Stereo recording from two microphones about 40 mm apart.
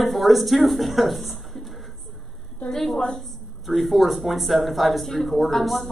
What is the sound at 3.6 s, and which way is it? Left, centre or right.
Speech, centre.